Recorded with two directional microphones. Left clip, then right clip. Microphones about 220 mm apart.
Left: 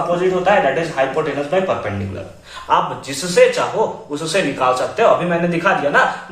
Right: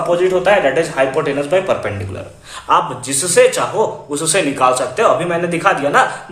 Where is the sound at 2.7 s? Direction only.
45° right (ahead or behind).